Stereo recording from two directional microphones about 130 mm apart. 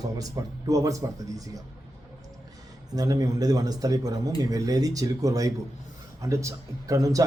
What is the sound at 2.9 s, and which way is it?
Speech, 30° right (ahead or behind).